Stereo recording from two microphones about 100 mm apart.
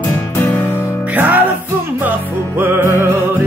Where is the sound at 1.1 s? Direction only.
20° right (ahead or behind).